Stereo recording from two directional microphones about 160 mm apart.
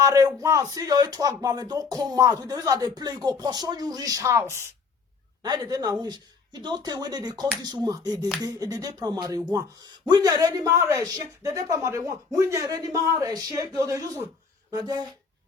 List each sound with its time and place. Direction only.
0.0 s speech: 20° right (ahead or behind)